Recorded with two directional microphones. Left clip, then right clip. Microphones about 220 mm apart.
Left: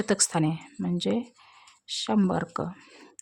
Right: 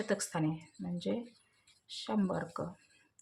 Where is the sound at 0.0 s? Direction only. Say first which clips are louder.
Left 9 dB; 50° left (ahead or behind).